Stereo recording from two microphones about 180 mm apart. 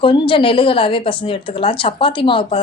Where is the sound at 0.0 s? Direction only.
30° left (ahead or behind).